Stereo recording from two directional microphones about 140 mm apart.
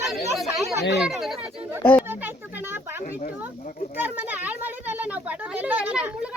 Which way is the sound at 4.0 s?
10° right (ahead or behind).